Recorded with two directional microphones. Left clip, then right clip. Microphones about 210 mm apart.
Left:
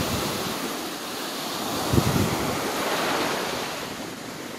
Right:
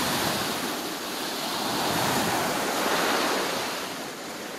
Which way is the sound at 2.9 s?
45° right (ahead or behind).